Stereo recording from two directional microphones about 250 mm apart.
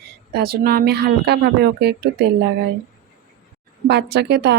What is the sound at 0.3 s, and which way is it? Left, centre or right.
Speech, right.